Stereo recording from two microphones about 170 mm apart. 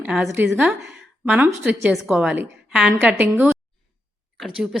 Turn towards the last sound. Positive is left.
turn(degrees=-5)  # may be behind; listen again after turning